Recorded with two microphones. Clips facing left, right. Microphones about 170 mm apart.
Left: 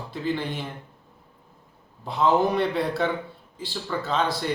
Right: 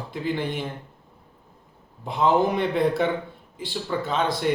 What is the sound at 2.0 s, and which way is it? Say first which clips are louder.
A man's voice: right 1 dB; 20° right (ahead or behind).